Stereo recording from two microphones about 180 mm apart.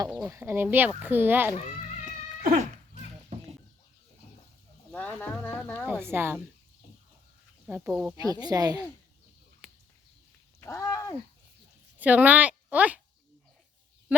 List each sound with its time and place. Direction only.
0.2 s speech: 15° right (ahead or behind)
2.0 s cat: 45° right (ahead or behind)
4.9 s speech: 5° left (ahead or behind)
5.9 s speech: 10° right (ahead or behind)
7.7 s speech: 10° right (ahead or behind)
8.4 s speech: 20° right (ahead or behind)
9.6 s a sound: 5° right (ahead or behind)
10.6 s a sound: 15° left (ahead or behind)
11.9 s speech: 10° right (ahead or behind)